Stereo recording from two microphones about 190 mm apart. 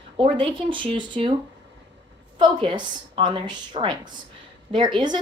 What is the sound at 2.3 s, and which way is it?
Speech, 25° right (ahead or behind).